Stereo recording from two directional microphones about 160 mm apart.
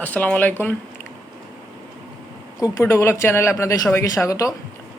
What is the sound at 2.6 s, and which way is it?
Speech, 20° left (ahead or behind).